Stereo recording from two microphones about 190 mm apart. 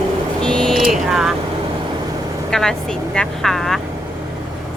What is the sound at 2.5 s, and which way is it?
Speech, centre (ahead or behind).